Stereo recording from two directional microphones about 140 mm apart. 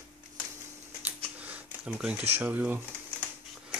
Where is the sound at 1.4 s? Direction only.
10° right (ahead or behind).